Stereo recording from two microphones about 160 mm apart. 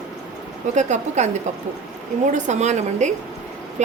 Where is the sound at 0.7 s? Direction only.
50° right (ahead or behind).